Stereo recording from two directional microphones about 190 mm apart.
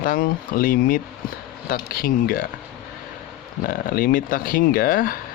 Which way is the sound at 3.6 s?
50° left (ahead or behind).